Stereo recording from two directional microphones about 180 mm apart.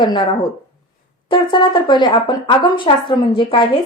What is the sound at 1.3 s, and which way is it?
A woman's voice, 25° left (ahead or behind).